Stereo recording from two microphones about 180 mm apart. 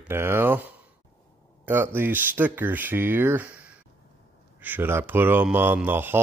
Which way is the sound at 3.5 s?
5° right (ahead or behind).